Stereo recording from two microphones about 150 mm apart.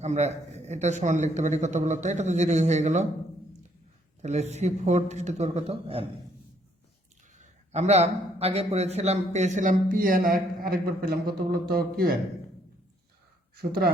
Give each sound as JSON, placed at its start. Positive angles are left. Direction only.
{"t": 0.0, "sound": "a man's voice", "side_deg": -50}
{"t": 4.2, "sound": "a man's voice", "side_deg": -50}
{"t": 7.3, "sound": "a man's voice", "side_deg": -50}
{"t": 13.6, "sound": "speech", "side_deg": -90}